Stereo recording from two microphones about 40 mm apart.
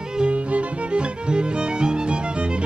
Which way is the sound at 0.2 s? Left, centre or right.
Right.